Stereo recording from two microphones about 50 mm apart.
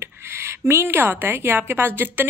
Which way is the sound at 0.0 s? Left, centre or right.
Right.